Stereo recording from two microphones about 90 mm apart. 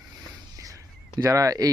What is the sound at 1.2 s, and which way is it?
Speech, 40° right (ahead or behind).